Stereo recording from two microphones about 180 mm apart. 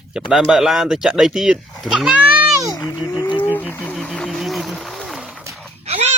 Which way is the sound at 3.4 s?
10° left (ahead or behind).